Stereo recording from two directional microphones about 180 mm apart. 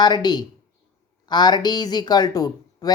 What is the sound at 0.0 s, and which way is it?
A woman's voice, 25° left (ahead or behind).